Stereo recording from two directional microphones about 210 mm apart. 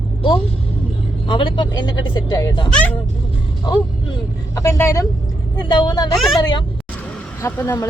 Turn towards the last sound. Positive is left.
turn(degrees=15)  # may be behind; listen again after turning